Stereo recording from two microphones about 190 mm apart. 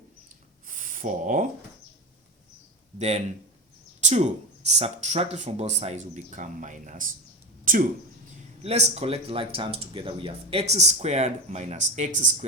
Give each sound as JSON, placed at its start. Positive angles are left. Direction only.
{"t": 0.7, "sound": "a sound", "side_deg": -45}
{"t": 3.0, "sound": "speech", "side_deg": -35}
{"t": 8.6, "sound": "speech", "side_deg": -35}